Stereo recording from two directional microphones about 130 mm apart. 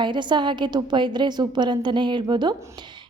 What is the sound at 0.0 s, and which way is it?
Speech, 35° right (ahead or behind).